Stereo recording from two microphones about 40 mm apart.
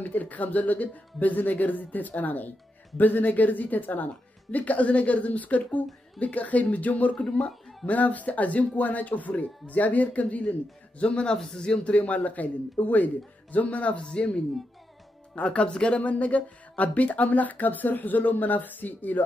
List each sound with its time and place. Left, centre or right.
0.0 s speech: left
7.2 s speech: centre
7.8 s speech: left